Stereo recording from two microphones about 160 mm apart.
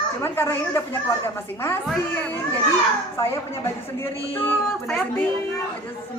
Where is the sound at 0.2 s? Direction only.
15° left (ahead or behind).